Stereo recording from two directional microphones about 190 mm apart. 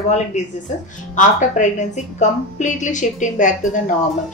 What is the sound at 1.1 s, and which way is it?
A woman's voice, 40° left (ahead or behind).